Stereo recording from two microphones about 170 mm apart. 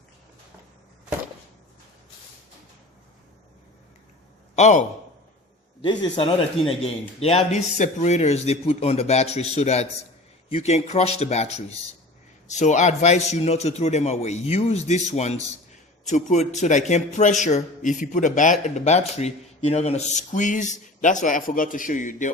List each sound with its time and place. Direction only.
4.5 s a man's voice: 45° left (ahead or behind)
5.8 s a man's voice: 25° left (ahead or behind); by 22.3 s 50° left (ahead or behind)